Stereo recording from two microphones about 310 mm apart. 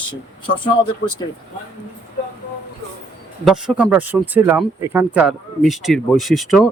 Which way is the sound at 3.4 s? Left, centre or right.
Centre.